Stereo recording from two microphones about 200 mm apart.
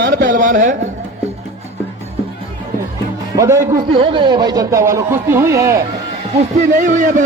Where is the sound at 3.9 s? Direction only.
30° right (ahead or behind).